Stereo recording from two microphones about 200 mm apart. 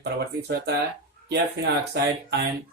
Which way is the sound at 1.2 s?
55° right (ahead or behind).